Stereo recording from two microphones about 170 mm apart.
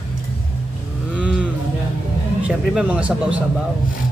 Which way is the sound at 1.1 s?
5° right (ahead or behind).